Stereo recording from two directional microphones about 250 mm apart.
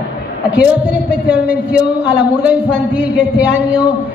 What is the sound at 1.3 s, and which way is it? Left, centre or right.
Speech, centre.